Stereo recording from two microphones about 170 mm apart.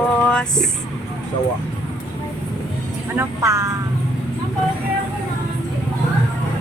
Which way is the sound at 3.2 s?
20° right (ahead or behind).